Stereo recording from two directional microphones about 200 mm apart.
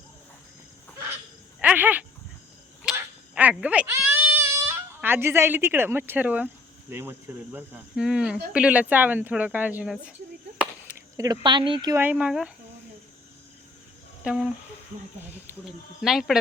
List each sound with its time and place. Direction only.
1.6 s dog: 10° right (ahead or behind)
2.8 s a sound: 10° right (ahead or behind)
6.9 s speech: 10° right (ahead or behind)
11.2 s speech: 20° right (ahead or behind)
11.9 s speech: 5° right (ahead or behind)
14.3 s speech: centre (ahead or behind)
16.0 s speech: centre (ahead or behind)